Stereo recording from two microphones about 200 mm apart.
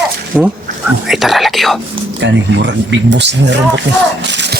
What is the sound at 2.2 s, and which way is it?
Speech, 65° right (ahead or behind).